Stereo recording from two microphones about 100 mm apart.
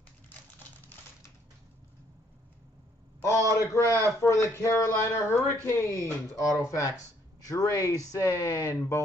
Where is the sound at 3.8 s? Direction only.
25° left (ahead or behind).